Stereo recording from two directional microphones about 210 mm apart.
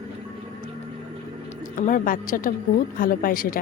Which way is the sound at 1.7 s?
40° left (ahead or behind).